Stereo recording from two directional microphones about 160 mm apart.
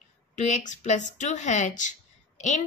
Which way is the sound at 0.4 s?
45° left (ahead or behind).